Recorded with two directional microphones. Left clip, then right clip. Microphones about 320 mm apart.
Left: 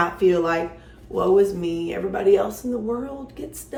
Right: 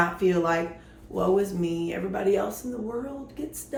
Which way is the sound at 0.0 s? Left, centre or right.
Centre.